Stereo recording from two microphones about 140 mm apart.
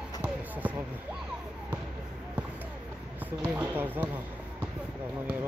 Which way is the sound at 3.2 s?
10° right (ahead or behind).